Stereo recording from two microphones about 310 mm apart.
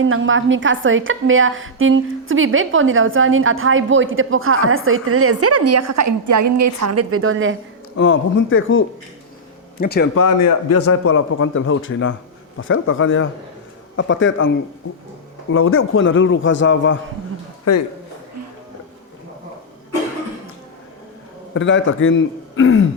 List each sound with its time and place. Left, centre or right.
0.0 s a woman's voice: right
7.9 s a man's voice: left
10.2 s a man's voice: left
21.5 s a man's voice: left